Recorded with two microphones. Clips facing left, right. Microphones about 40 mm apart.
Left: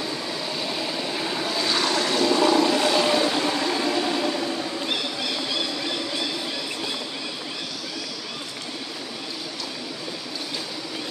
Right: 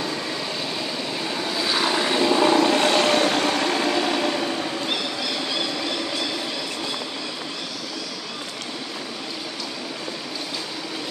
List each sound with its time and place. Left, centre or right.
0.7 s vehicle: centre; by 2.5 s right
2.5 s vehicle: right